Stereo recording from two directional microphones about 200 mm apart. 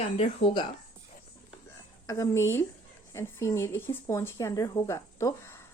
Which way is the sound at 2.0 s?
15° left (ahead or behind).